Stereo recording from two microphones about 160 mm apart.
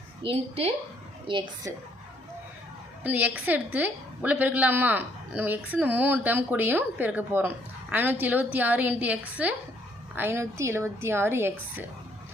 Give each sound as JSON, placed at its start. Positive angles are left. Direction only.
{"t": 0.2, "sound": "a woman's voice", "side_deg": -35}
{"t": 3.0, "sound": "speech", "side_deg": -10}